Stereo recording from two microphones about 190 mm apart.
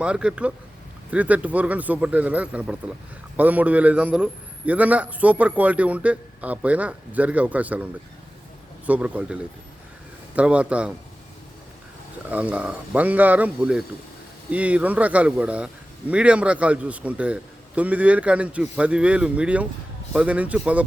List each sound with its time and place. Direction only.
0.0 s speech: 5° right (ahead or behind)
8.9 s speech: 10° right (ahead or behind)
12.3 s speech: 5° right (ahead or behind)